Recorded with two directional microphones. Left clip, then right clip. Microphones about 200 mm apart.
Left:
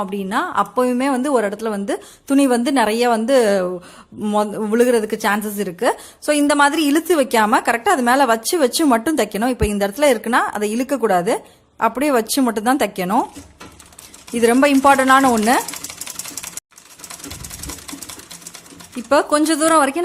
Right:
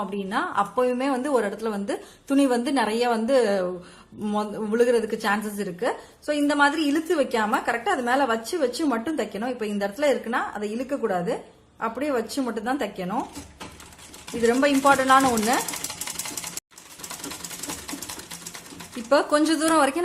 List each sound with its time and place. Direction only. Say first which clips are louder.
0.0 s a woman's voice: left 6 dB; 35° left (ahead or behind)
14.4 s speech: left 6 dB; 35° left (ahead or behind)
19.0 s speech: left 5 dB; 25° left (ahead or behind)